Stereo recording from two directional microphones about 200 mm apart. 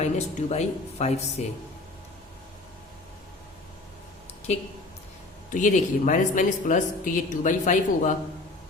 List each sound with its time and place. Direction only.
0.0 s speech: 35° left (ahead or behind)
5.5 s speech: 40° left (ahead or behind)